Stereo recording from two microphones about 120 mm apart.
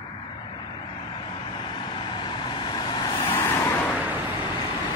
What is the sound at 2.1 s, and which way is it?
Vehicle, 40° left (ahead or behind).